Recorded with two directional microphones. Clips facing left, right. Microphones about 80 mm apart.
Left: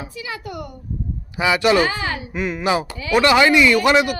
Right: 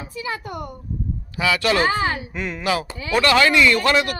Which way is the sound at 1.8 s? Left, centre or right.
Right.